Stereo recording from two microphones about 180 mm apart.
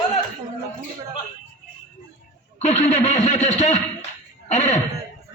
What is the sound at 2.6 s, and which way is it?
Speech, 35° left (ahead or behind).